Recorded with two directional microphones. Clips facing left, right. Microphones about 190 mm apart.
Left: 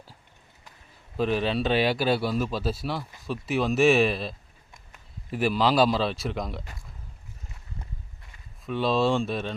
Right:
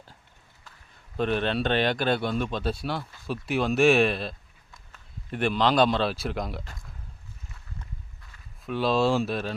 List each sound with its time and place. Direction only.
1.1 s speech: 5° left (ahead or behind)
7.8 s walk: 25° left (ahead or behind)
8.6 s speech: centre (ahead or behind)